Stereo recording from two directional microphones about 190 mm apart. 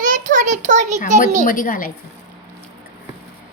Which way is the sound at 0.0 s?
45° right (ahead or behind).